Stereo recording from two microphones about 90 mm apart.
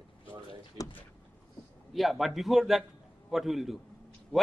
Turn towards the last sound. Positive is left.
turn(degrees=5)  # may be behind; listen again after turning